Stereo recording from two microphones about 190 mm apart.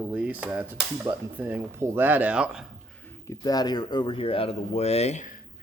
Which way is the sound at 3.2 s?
20° left (ahead or behind).